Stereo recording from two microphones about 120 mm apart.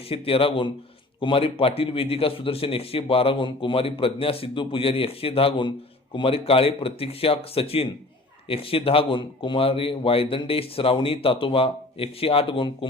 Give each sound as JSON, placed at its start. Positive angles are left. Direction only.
{"t": 0.1, "sound": "a man's voice", "side_deg": 50}